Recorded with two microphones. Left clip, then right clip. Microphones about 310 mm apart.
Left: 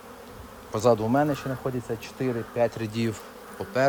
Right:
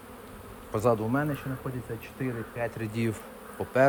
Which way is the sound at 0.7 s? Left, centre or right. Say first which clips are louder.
Left 5 dB; centre.